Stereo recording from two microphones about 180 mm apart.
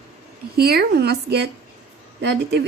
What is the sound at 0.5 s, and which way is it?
A woman's voice, 60° right (ahead or behind).